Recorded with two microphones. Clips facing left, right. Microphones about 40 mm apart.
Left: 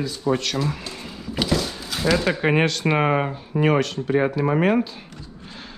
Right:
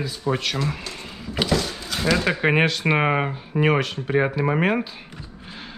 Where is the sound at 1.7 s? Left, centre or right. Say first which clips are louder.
Left 1 dB; centre.